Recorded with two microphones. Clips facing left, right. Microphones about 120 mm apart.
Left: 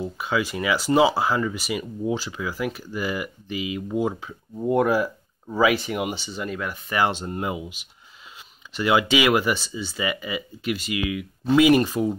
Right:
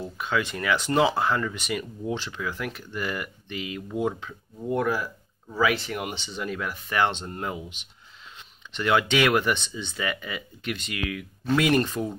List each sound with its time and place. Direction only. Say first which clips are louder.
0.0 s speech: left 2 dB; 5° left (ahead or behind)